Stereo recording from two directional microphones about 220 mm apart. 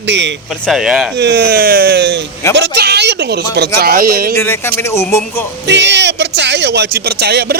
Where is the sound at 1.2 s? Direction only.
50° right (ahead or behind).